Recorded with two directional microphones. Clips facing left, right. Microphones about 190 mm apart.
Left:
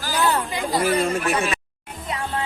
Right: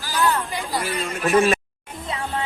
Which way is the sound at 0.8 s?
35° left (ahead or behind).